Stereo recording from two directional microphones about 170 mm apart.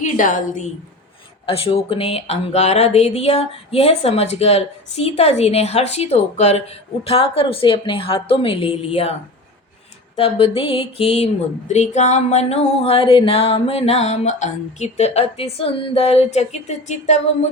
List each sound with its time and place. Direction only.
0.2 s a woman's voice: 50° left (ahead or behind)
1.5 s speech: 35° left (ahead or behind)
10.2 s speech: 35° left (ahead or behind)